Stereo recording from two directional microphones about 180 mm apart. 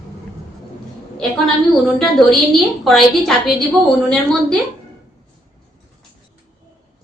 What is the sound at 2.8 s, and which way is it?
Speech, centre (ahead or behind).